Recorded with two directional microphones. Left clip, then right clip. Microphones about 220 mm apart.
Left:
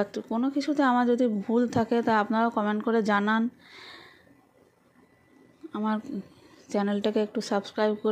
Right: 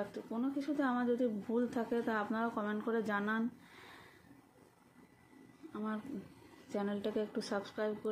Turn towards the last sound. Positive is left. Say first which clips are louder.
# left 11 dB
turn(degrees=40)  # may be behind; listen again after turning